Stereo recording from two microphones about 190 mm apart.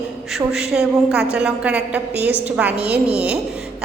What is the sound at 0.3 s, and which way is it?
A woman's voice, 5° right (ahead or behind).